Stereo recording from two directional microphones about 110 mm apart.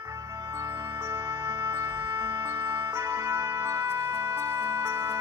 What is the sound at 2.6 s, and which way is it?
Music, 40° right (ahead or behind).